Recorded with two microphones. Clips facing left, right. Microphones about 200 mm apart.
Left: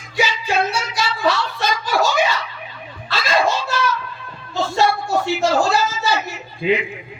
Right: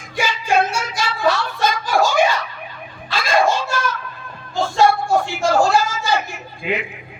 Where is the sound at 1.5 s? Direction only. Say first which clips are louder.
Right 2 dB; 50° right (ahead or behind).